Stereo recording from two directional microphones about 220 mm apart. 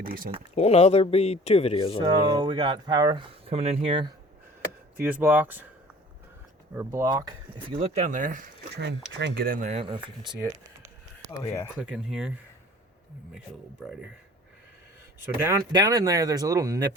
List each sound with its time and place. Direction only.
0.0 s speech: 40° right (ahead or behind)
0.5 s speech: 30° left (ahead or behind)
2.0 s speech: 20° right (ahead or behind)
4.9 s speech: 10° right (ahead or behind)
6.7 s speech: 15° right (ahead or behind)
7.8 s speech: 35° right (ahead or behind)
9.1 s speech: 50° right (ahead or behind); by 10.5 s 20° right (ahead or behind)
11.3 s speech: 15° left (ahead or behind)
11.8 s speech: 5° right (ahead or behind)
13.8 s speech: 5° right (ahead or behind)
15.4 s speech: 15° right (ahead or behind)